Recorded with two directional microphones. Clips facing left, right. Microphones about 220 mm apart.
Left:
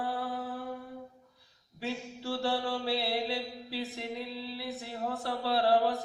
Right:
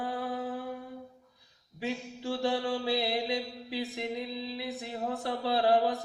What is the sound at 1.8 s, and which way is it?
Mantra, 15° right (ahead or behind).